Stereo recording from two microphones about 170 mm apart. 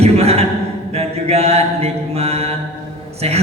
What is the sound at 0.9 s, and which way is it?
Mantra, 35° right (ahead or behind).